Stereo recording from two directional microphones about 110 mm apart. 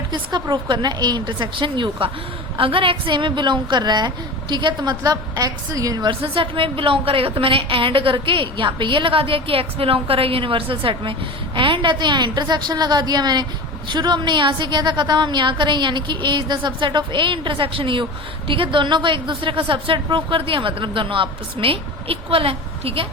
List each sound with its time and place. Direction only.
0.1 s a woman's voice: 40° right (ahead or behind); by 23.0 s 60° right (ahead or behind)